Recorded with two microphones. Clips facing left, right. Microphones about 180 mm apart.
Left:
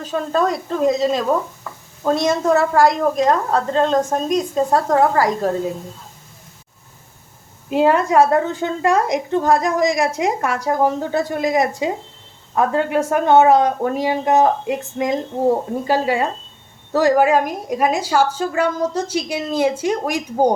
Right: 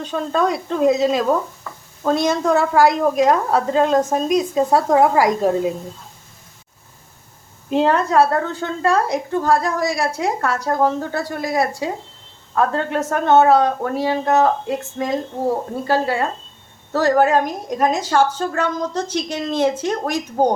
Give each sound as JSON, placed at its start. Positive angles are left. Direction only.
{"t": 0.0, "sound": "a woman's voice", "side_deg": 0}
{"t": 7.7, "sound": "a woman's voice", "side_deg": 10}